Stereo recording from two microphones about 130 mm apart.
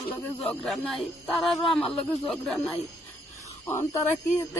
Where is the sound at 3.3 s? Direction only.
20° left (ahead or behind).